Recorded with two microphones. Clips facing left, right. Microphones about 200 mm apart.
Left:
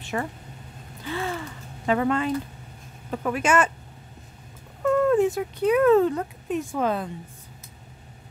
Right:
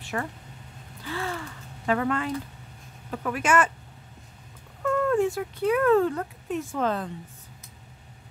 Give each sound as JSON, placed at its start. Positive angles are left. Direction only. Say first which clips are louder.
{"t": 0.0, "sound": "a sound", "louder": "left 2 dB", "side_deg": 20}
{"t": 1.0, "sound": "speech", "louder": "left 3 dB", "side_deg": 20}
{"t": 4.8, "sound": "speech", "louder": "left 4 dB", "side_deg": 20}